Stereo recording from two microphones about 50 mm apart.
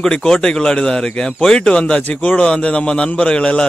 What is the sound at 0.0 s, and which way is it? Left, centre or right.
A man's voice, centre.